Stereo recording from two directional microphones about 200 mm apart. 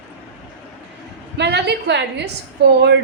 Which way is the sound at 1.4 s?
55° right (ahead or behind).